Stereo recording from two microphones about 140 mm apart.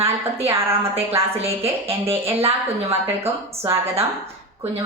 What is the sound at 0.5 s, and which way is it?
Speech, 20° right (ahead or behind).